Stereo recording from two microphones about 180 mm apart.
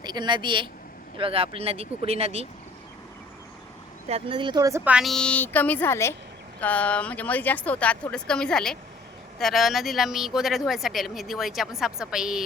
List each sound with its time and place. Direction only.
0.0 s a woman's voice: 25° right (ahead or behind)
4.1 s speech: 30° right (ahead or behind)
4.9 s speech: centre (ahead or behind)